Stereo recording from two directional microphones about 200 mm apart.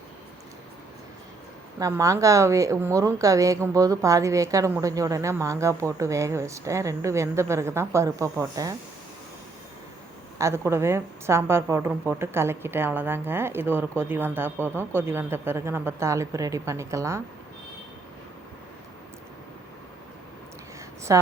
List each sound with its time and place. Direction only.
1.8 s a woman's voice: 15° right (ahead or behind)
10.3 s a woman's voice: 15° right (ahead or behind)
21.1 s a woman's voice: 15° right (ahead or behind)